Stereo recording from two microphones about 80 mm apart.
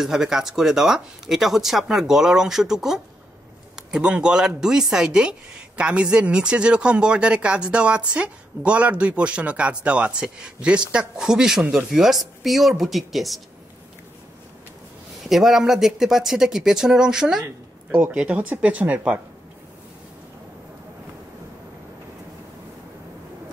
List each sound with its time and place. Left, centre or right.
0.0 s speech: centre
15.2 s speech: centre